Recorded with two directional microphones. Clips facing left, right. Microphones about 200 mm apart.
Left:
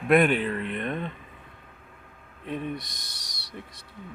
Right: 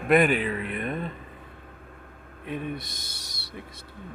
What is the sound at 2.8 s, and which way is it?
Speech, centre (ahead or behind).